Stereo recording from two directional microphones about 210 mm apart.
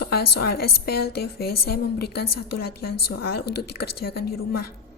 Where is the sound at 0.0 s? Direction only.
50° left (ahead or behind).